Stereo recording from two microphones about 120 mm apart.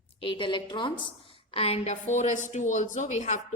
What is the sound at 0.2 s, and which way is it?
A woman's voice, 45° left (ahead or behind).